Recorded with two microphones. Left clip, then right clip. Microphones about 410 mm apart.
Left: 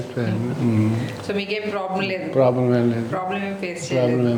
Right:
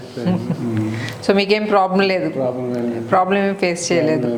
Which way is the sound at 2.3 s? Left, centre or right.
Left.